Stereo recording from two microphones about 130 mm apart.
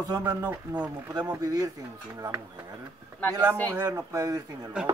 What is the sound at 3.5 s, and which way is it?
Speech, 20° right (ahead or behind).